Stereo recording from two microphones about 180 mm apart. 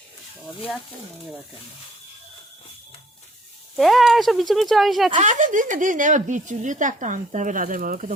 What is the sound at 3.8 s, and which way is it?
Speech, centre (ahead or behind).